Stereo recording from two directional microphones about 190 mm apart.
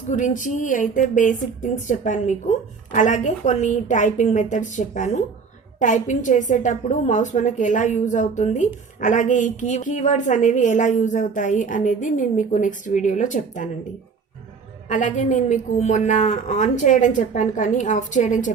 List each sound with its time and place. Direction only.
0.1 s a woman's voice: 40° left (ahead or behind)
14.8 s a woman's voice: 40° left (ahead or behind)